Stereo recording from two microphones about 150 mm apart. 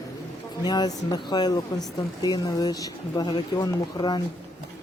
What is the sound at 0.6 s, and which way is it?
Speech, 30° left (ahead or behind).